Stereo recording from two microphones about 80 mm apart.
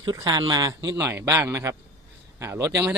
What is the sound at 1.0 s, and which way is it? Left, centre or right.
Speech, right.